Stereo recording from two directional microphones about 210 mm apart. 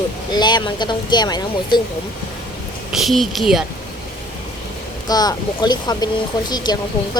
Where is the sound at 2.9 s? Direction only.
Centre (ahead or behind).